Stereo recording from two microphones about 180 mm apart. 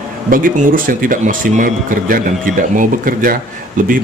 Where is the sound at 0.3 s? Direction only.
50° right (ahead or behind).